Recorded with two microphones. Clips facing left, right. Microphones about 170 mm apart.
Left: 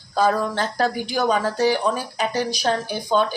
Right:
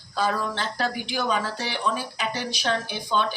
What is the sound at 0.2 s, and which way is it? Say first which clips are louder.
Speech: left 6 dB; 45° left (ahead or behind).